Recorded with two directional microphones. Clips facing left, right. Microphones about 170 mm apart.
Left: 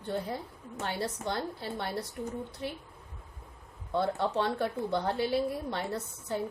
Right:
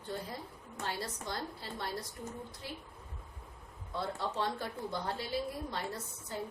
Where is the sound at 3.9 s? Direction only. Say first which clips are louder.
Left 7 dB; 65° left (ahead or behind).